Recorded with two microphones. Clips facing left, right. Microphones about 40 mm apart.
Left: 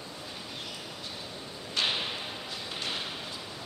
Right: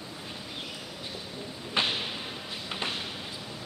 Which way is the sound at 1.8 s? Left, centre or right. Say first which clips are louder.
Right 2 dB; right.